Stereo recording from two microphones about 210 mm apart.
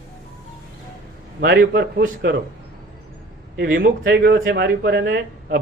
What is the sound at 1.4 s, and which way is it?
Speech, 50° right (ahead or behind).